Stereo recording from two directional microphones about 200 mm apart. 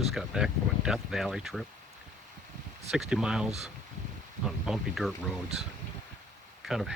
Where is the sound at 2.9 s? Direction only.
5° right (ahead or behind).